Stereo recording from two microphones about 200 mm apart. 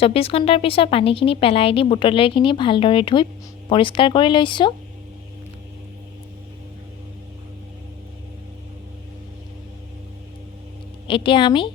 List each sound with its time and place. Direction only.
0.0 s speech: 30° left (ahead or behind)
11.1 s speech: 25° left (ahead or behind)